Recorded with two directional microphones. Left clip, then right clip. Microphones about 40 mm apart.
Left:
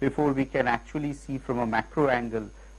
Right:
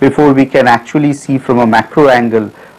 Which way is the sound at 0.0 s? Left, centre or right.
Centre.